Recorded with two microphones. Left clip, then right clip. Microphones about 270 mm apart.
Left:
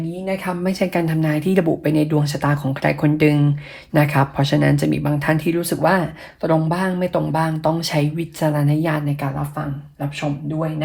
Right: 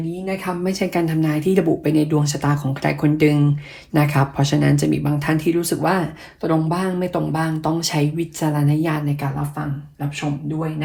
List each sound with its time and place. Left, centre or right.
0.3 s speech: left